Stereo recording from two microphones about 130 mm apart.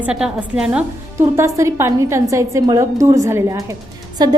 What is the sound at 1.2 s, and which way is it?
A woman's voice, 20° right (ahead or behind).